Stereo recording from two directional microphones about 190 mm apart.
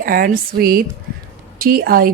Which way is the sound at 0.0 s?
50° right (ahead or behind).